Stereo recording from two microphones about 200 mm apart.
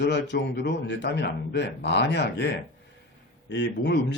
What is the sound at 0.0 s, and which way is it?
Speech, 60° left (ahead or behind).